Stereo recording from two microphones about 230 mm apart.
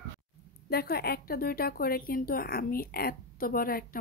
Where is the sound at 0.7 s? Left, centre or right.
Left.